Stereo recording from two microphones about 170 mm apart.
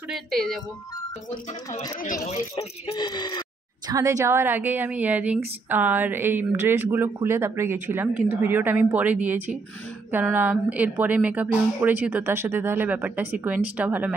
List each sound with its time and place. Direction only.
0.1 s speech: centre (ahead or behind)
2.0 s speech: 50° left (ahead or behind)
2.5 s speech: 25° left (ahead or behind)
3.8 s speech: 20° right (ahead or behind)